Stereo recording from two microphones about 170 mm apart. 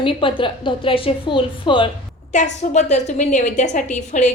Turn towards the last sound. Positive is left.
turn(degrees=45)  # may be behind; listen again after turning